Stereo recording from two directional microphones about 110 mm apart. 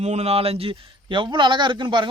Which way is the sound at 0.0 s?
80° right.